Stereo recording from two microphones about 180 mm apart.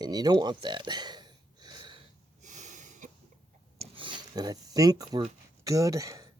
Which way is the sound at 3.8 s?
30° right (ahead or behind).